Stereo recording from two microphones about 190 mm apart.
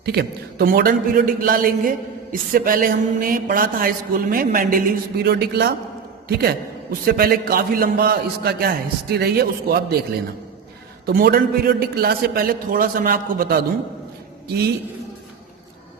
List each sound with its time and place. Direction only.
0.0 s a man's voice: 60° right (ahead or behind)
11.0 s a man's voice: 55° right (ahead or behind)